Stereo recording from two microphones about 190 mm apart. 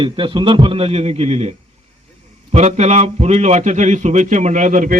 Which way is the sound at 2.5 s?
35° right (ahead or behind).